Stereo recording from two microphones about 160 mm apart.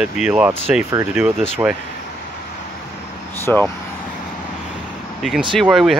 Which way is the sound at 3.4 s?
10° left (ahead or behind).